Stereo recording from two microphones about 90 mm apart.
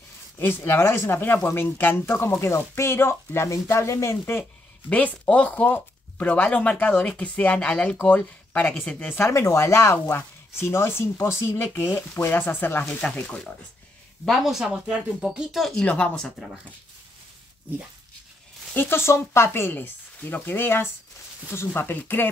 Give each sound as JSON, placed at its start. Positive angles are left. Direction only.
{"t": 0.4, "sound": "speech", "side_deg": 25}
{"t": 4.8, "sound": "speech", "side_deg": 15}
{"t": 9.1, "sound": "speech", "side_deg": 30}
{"t": 10.1, "sound": "speech", "side_deg": 25}
{"t": 14.2, "sound": "speech", "side_deg": 0}
{"t": 18.8, "sound": "speech", "side_deg": 25}